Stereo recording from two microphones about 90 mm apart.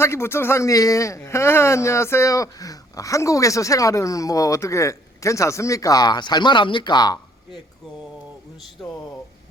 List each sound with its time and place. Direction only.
0.0 s speech: 30° left (ahead or behind); by 7.2 s 55° left (ahead or behind)